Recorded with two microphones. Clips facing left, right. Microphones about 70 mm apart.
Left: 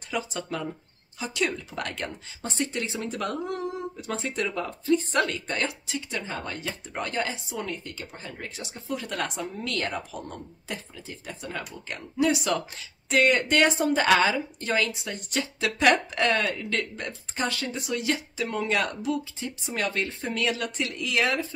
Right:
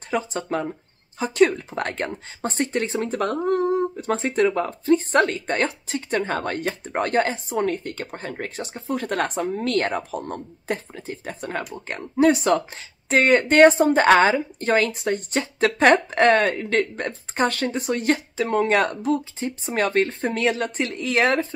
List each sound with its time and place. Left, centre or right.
0.1 s speech: right